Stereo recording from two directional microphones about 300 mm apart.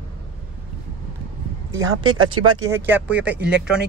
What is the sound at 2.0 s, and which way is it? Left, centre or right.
Speech, right.